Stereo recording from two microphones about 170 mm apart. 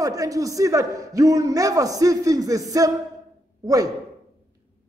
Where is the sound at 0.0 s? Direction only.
20° right (ahead or behind).